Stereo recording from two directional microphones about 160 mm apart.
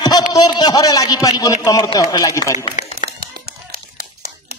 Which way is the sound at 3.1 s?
80° right.